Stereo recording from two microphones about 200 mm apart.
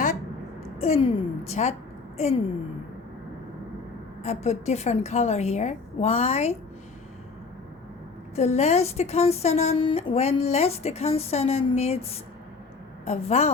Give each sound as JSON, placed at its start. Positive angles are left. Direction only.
{"t": 0.8, "sound": "a woman's voice", "side_deg": 30}
{"t": 4.2, "sound": "a woman's voice", "side_deg": 35}
{"t": 8.4, "sound": "a woman's voice", "side_deg": 35}